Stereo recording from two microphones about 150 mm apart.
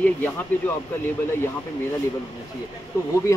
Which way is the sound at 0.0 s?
10° left (ahead or behind).